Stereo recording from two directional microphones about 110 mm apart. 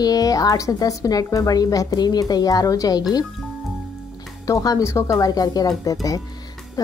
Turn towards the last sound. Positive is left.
turn(degrees=30)  # may be behind; listen again after turning